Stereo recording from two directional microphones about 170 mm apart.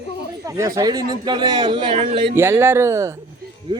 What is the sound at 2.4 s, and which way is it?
Speech, 15° right (ahead or behind).